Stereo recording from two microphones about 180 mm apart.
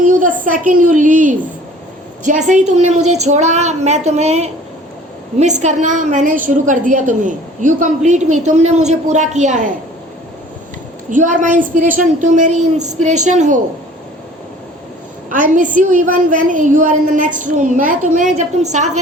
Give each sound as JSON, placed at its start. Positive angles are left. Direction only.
{"t": 0.0, "sound": "a woman's voice", "side_deg": -45}
{"t": 11.1, "sound": "a woman's voice", "side_deg": -45}
{"t": 15.3, "sound": "a woman's voice", "side_deg": -45}